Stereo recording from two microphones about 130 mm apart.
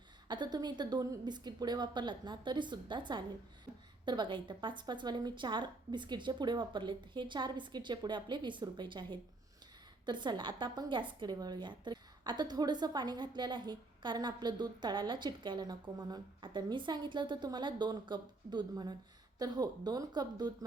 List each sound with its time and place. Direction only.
0.3 s a woman's voice: 35° right (ahead or behind)